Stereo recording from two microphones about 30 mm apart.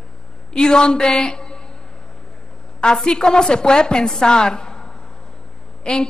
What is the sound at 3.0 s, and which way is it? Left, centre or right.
A woman's voice, left.